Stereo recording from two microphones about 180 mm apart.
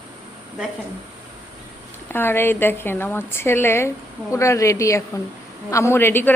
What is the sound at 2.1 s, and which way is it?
A woman's voice, 10° left (ahead or behind).